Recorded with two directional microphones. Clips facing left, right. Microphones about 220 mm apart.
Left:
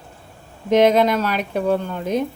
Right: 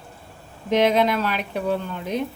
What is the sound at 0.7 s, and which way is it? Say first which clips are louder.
Speech: left 4 dB; 45° left (ahead or behind).